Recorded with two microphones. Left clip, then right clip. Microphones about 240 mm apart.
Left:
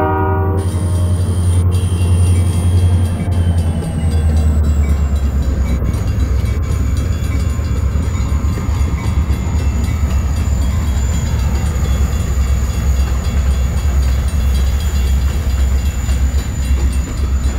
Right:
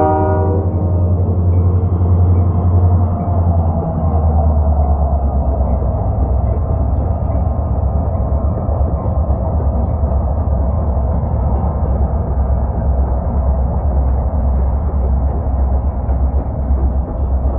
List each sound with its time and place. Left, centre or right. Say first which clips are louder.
0.0 s train horn: right 2 dB; left